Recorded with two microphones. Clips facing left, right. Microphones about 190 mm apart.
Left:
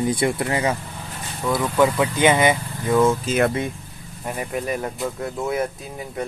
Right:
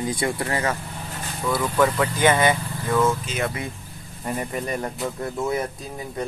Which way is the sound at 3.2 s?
55° left (ahead or behind).